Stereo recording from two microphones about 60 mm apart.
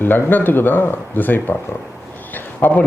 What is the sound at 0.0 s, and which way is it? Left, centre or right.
Speech, left.